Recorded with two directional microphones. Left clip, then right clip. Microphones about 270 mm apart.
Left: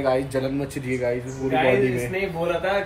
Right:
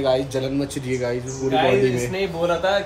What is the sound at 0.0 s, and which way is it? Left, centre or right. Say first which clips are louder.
Speech: right 2 dB; centre.